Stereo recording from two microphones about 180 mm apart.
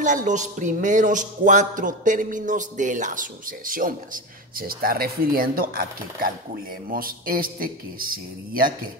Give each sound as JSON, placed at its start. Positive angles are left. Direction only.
{"t": 0.0, "sound": "speech", "side_deg": -45}